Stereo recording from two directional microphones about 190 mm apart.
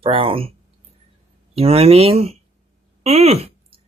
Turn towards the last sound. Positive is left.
turn(degrees=-35)  # may be behind; listen again after turning